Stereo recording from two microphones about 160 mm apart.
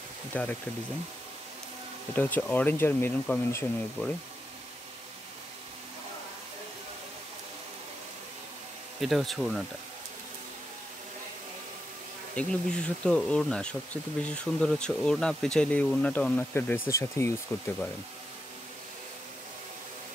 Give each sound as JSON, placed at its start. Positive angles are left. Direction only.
{"t": 0.3, "sound": "speech", "side_deg": 10}
{"t": 2.1, "sound": "speech", "side_deg": 10}
{"t": 9.0, "sound": "speech", "side_deg": 0}
{"t": 12.4, "sound": "speech", "side_deg": 5}